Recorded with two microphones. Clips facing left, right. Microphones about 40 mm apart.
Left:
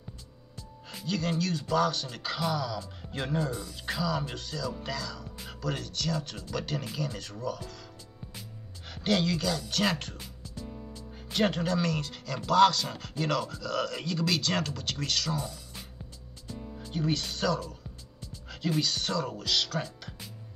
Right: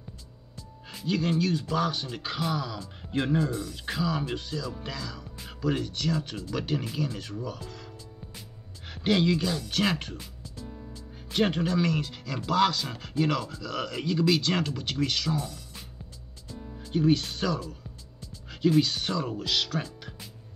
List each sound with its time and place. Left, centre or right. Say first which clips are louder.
1.0 s speech: right 4 dB; centre
8.8 s speech: right 3 dB; centre
11.3 s speech: right 2 dB; centre
16.9 s speech: right 7 dB; centre
18.8 s speech: right 4 dB; centre